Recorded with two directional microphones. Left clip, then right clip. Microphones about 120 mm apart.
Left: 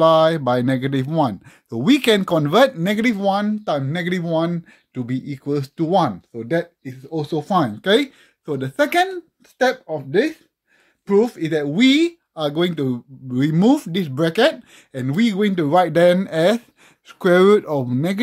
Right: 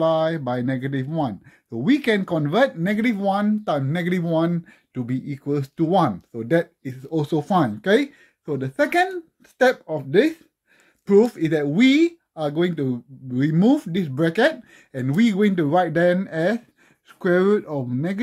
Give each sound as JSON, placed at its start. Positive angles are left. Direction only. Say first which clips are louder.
{"t": 0.0, "sound": "speech", "louder": "left 6 dB", "side_deg": 45}
{"t": 3.2, "sound": "speech", "louder": "left 2 dB", "side_deg": 10}
{"t": 3.6, "sound": "speech", "louder": "left 2 dB", "side_deg": 0}
{"t": 5.9, "sound": "speech", "louder": "left 2 dB", "side_deg": -5}
{"t": 6.3, "sound": "speech", "louder": "right 1 dB", "side_deg": -25}
{"t": 7.8, "sound": "speech", "louder": "left 2 dB", "side_deg": 15}
{"t": 9.6, "sound": "speech", "louder": "even", "side_deg": -15}
{"t": 9.9, "sound": "speech", "louder": "right 1 dB", "side_deg": -25}
{"t": 12.4, "sound": "speech", "louder": "left 3 dB", "side_deg": 25}
{"t": 15.7, "sound": "speech", "louder": "left 7 dB", "side_deg": 30}